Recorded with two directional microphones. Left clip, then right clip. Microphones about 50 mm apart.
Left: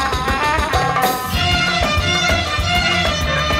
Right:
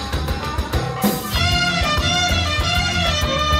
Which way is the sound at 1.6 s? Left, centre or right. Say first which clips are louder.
Left 2 dB; right.